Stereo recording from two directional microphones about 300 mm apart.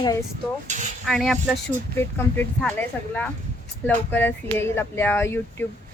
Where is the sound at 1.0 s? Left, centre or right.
Centre.